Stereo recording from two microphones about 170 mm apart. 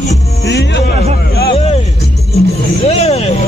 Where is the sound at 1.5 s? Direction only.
35° left (ahead or behind).